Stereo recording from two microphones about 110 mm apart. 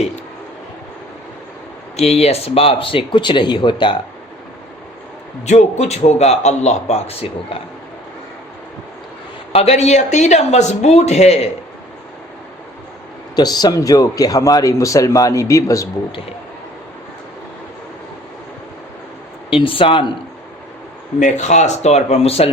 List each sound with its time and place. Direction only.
2.0 s speech: 70° left (ahead or behind); by 3.9 s 45° left (ahead or behind)
5.5 s a man's voice: 90° left; by 7.6 s 65° left (ahead or behind)
9.5 s a man's voice: 70° left (ahead or behind); by 11.3 s 85° left
13.3 s speech: 40° left (ahead or behind)
19.5 s speech: 55° left (ahead or behind)
21.3 s speech: 90° left; by 22.5 s 65° left (ahead or behind)